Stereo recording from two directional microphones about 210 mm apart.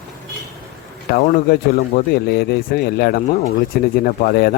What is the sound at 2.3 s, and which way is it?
A man's voice, 50° left (ahead or behind).